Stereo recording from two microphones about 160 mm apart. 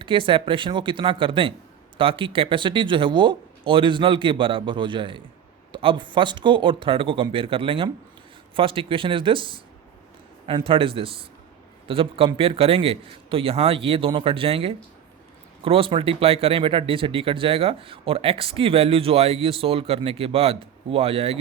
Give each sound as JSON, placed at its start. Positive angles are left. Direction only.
{"t": 0.0, "sound": "speech", "side_deg": -30}